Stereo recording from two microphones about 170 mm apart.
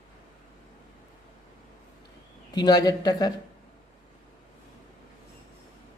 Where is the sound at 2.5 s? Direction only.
25° left (ahead or behind).